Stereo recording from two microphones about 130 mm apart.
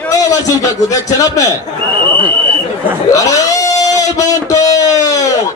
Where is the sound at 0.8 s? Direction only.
25° left (ahead or behind).